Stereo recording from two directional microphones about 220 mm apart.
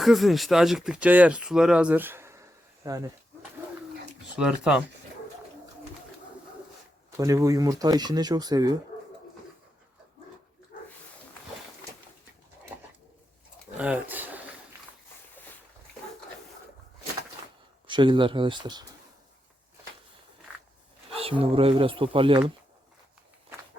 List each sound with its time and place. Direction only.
0.0 s speech: centre (ahead or behind)
4.4 s speech: 5° right (ahead or behind)
7.2 s speech: 15° right (ahead or behind)
13.7 s a sound: 5° right (ahead or behind)
17.8 s speech: 20° right (ahead or behind)
21.1 s speech: 25° right (ahead or behind)